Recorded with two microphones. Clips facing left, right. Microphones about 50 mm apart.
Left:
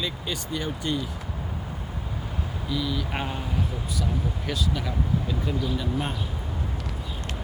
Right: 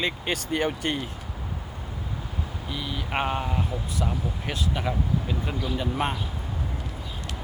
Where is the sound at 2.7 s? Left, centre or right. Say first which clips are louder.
Left 2 dB; right.